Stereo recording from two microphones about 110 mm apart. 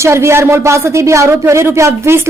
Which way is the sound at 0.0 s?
25° right (ahead or behind).